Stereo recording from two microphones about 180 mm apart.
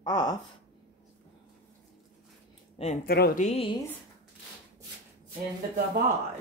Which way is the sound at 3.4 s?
30° left (ahead or behind).